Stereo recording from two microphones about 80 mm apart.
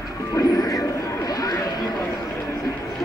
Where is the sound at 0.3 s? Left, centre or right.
Left.